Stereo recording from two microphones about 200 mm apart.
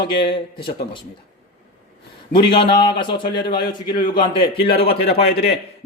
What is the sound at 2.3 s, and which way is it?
Speech, 25° left (ahead or behind).